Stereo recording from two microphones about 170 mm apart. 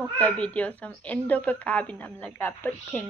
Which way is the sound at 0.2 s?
5° left (ahead or behind).